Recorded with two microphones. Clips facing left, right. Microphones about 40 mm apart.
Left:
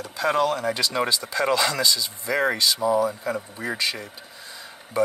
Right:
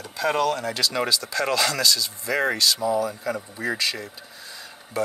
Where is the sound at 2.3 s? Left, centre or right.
Centre.